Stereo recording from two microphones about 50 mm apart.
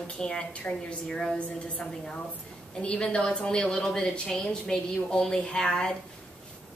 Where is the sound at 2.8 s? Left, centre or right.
Centre.